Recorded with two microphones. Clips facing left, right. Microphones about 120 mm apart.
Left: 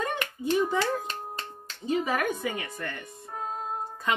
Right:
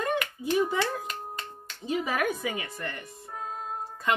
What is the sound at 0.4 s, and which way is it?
Clapping, 10° right (ahead or behind).